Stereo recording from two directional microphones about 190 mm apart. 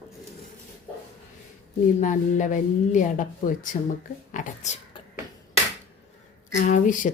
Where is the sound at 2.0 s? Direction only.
40° left (ahead or behind).